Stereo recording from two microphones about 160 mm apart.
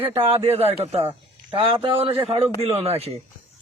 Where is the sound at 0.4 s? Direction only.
40° right (ahead or behind).